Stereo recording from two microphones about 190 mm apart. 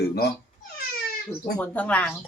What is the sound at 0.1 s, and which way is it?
Speech, 55° left (ahead or behind).